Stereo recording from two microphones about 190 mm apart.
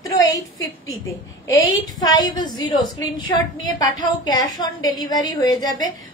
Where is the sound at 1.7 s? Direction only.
20° left (ahead or behind).